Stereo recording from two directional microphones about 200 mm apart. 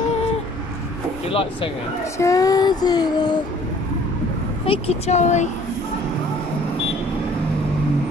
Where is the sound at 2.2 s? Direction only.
15° left (ahead or behind).